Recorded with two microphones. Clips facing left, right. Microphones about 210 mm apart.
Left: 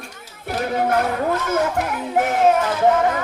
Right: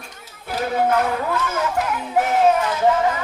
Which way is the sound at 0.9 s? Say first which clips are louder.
Left 1 dB; 45° left (ahead or behind).